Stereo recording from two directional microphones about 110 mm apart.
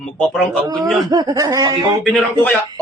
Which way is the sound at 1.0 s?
35° right (ahead or behind).